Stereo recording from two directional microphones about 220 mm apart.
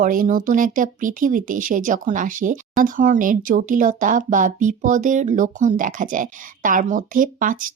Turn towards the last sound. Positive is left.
turn(degrees=-35)  # may be behind; listen again after turning